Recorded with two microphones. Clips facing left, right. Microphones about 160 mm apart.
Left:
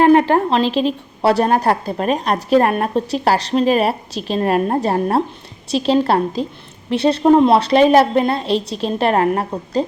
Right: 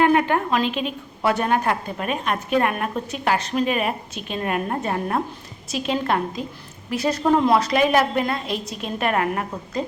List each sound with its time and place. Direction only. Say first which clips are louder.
0.0 s a woman's voice: left 6 dB; 30° left (ahead or behind)